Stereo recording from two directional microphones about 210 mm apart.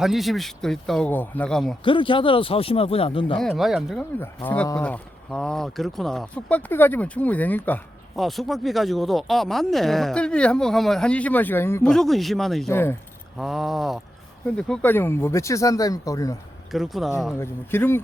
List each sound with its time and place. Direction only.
0.0 s speech: centre (ahead or behind)
1.8 s speech: 25° left (ahead or behind)
3.4 s speech: centre (ahead or behind)
12.7 s speech: 10° left (ahead or behind)
13.3 s speech: centre (ahead or behind); by 16.4 s 15° left (ahead or behind)
16.7 s speech: centre (ahead or behind)
17.3 s speech: 10° left (ahead or behind)